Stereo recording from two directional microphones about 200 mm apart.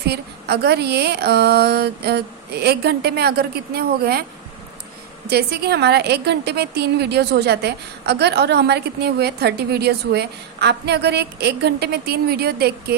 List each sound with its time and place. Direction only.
0.0 s a woman's voice: 55° right (ahead or behind)
5.3 s a woman's voice: 55° right (ahead or behind)